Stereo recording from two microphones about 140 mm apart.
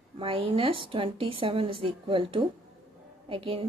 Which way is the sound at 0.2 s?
40° right (ahead or behind).